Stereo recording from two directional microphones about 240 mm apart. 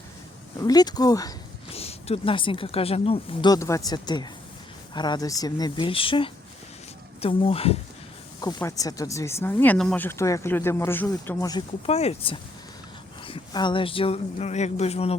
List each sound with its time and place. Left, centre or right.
0.6 s speech: centre
11.9 s speech: left